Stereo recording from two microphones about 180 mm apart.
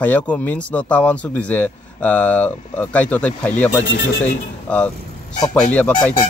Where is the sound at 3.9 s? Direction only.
75° left (ahead or behind).